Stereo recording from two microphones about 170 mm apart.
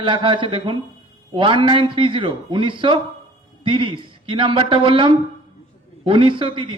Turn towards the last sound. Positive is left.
turn(degrees=-30)  # may be behind; listen again after turning